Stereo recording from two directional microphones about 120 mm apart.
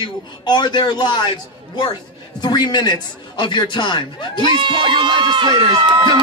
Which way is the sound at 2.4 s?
35° left (ahead or behind).